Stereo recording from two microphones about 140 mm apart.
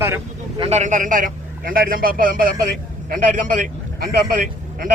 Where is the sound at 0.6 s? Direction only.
55° right (ahead or behind).